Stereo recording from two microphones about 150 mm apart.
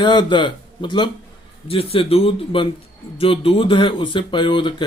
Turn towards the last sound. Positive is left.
turn(degrees=35)  # may be behind; listen again after turning